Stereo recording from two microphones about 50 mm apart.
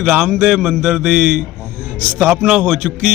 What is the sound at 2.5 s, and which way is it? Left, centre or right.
Speech, centre.